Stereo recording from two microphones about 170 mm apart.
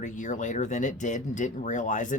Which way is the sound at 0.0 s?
45° left (ahead or behind).